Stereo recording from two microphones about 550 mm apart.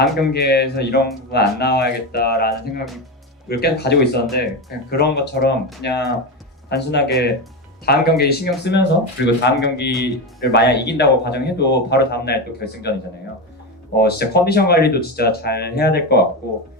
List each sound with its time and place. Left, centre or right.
0.0 s speech: centre
13.9 s speech: centre